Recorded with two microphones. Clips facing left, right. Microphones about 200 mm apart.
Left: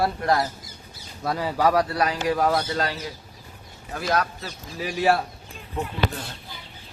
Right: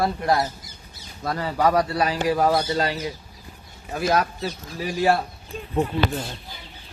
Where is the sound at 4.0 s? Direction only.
15° right (ahead or behind).